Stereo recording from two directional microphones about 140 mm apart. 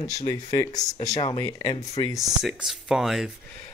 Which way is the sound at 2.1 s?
Centre (ahead or behind).